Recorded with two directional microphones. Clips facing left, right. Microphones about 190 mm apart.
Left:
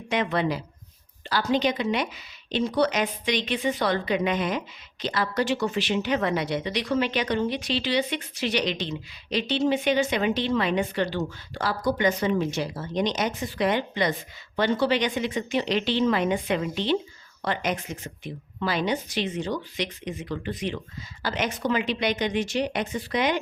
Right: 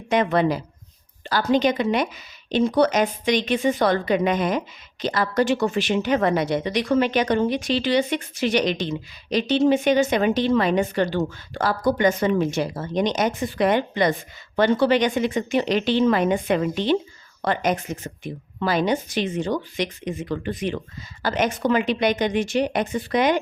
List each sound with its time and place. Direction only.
0.1 s speech: 45° right (ahead or behind)